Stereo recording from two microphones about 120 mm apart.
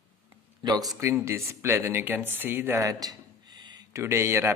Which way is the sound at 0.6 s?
30° right (ahead or behind).